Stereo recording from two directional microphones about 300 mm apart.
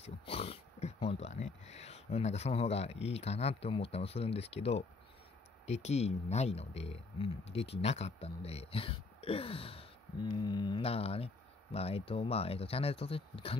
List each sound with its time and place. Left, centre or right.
0.0 s speech: centre